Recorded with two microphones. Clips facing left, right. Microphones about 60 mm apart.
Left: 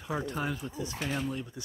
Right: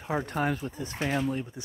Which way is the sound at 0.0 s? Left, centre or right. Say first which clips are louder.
Right 4 dB; right.